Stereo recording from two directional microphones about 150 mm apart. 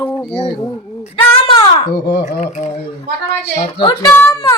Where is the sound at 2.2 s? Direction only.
50° left (ahead or behind).